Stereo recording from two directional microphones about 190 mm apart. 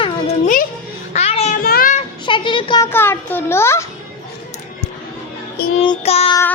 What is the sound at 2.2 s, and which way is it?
Speech, 25° left (ahead or behind).